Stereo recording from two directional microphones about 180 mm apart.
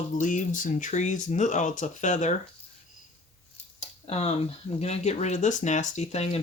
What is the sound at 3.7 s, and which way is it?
Cutlery, 35° left (ahead or behind).